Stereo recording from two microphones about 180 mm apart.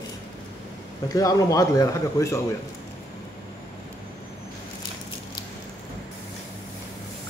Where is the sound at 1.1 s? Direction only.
20° left (ahead or behind).